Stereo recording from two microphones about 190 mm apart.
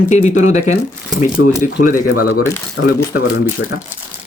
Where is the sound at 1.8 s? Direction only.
50° left (ahead or behind).